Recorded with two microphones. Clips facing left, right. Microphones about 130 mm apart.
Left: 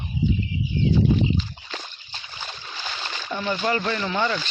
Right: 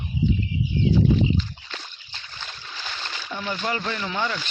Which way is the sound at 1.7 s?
10° left (ahead or behind).